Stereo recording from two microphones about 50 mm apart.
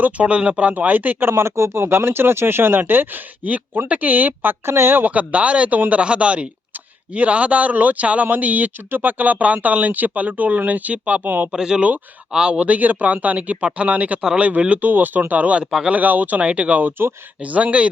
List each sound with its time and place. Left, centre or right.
0.0 s speech: right
1.3 s speech: right
4.6 s speech: right
5.1 s speech: right
11.5 s speech: centre
12.5 s speech: right
15.6 s speech: centre
15.9 s speech: right